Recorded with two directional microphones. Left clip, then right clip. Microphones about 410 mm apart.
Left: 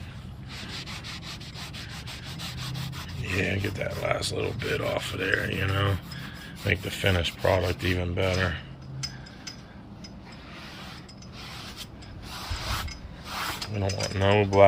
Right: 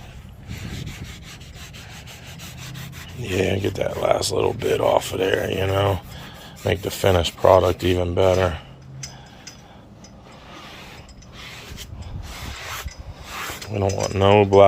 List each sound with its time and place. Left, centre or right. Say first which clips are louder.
3.2 s speech: right 7 dB; centre
13.5 s speech: right 7 dB; centre